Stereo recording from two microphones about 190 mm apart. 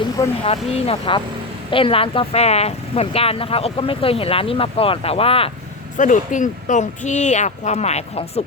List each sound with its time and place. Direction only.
0.4 s speech: 30° left (ahead or behind)
6.0 s speech: 40° left (ahead or behind)